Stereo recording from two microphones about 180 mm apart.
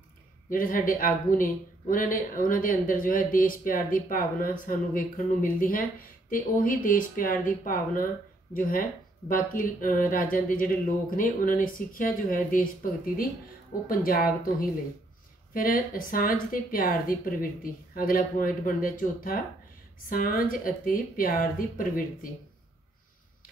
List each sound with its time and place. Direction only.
0.5 s speech: 50° left (ahead or behind)